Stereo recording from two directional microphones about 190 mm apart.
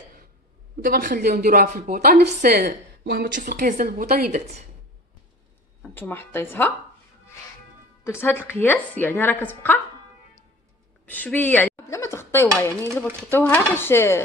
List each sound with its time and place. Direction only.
0.8 s a woman's voice: 50° right (ahead or behind)
3.3 s a woman's voice: 45° right (ahead or behind)
5.8 s a woman's voice: 10° left (ahead or behind)
8.0 s a woman's voice: 15° left (ahead or behind)
11.1 s a sound: 10° left (ahead or behind)
13.3 s a woman's voice: 10° left (ahead or behind)